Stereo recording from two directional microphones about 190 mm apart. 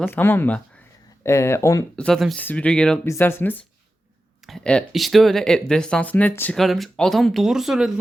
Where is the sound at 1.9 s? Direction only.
5° left (ahead or behind).